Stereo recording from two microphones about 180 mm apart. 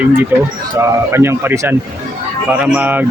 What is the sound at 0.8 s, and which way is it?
Speech, 15° right (ahead or behind).